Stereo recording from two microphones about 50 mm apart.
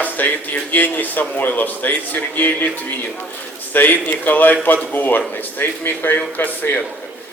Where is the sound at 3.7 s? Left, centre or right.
Left.